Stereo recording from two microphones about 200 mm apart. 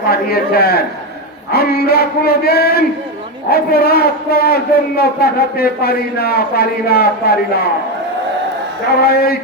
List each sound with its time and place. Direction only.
0.1 s a man's voice: 50° left (ahead or behind)
9.0 s a man's voice: 50° left (ahead or behind)